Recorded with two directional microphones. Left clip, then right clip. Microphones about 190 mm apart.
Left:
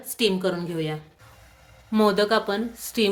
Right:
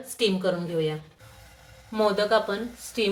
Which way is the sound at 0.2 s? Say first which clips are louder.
Left 1 dB; 55° left (ahead or behind).